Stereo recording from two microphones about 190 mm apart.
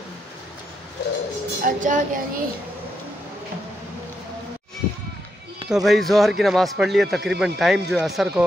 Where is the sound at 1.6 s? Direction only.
45° right (ahead or behind).